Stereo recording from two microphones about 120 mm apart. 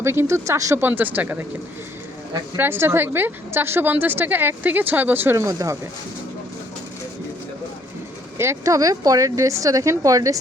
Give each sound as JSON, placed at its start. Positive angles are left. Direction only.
{"t": 0.0, "sound": "speech", "side_deg": -20}
{"t": 2.6, "sound": "a woman's voice", "side_deg": -20}
{"t": 8.4, "sound": "speech", "side_deg": -25}